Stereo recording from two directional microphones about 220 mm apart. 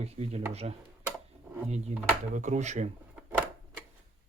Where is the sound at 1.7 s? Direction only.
30° right (ahead or behind).